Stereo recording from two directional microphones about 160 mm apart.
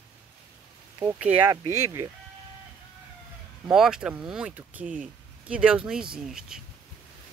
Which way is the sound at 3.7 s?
5° right (ahead or behind).